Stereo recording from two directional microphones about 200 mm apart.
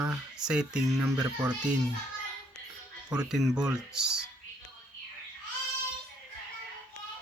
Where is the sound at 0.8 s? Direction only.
15° right (ahead or behind).